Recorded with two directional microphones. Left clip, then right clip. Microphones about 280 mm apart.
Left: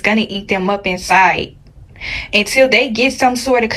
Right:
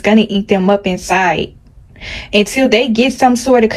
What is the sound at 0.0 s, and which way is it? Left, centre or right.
Speech, centre.